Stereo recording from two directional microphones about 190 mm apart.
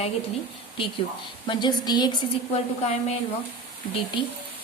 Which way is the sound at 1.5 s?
25° left (ahead or behind).